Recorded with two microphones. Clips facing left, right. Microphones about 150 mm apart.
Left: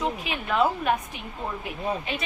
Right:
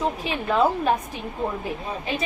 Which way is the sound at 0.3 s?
35° right (ahead or behind).